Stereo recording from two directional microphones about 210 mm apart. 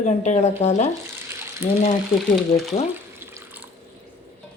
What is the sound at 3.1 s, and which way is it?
Water, 10° right (ahead or behind).